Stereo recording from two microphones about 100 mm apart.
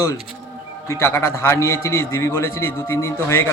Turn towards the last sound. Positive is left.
turn(degrees=25)  # may be behind; listen again after turning